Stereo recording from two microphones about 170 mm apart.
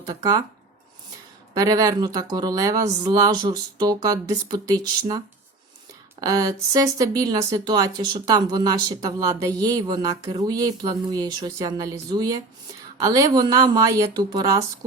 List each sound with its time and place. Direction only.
0.0 s speech: 25° right (ahead or behind)
1.5 s speech: 20° right (ahead or behind)